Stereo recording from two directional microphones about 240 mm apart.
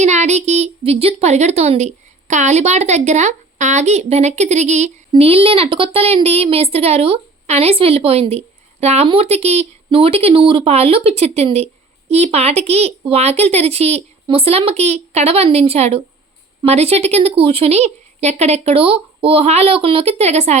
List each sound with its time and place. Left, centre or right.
0.0 s a woman's voice: right